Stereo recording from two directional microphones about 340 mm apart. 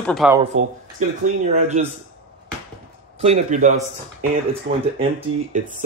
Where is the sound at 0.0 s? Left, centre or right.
Centre.